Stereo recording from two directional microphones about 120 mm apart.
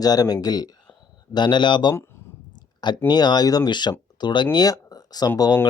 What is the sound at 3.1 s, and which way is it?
Speech, 35° left (ahead or behind).